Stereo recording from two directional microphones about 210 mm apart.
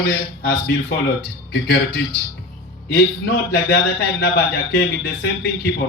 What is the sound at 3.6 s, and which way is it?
Speech, 50° left (ahead or behind).